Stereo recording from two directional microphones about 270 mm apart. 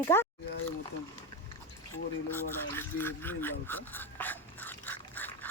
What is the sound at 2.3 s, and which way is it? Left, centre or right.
Speech, centre.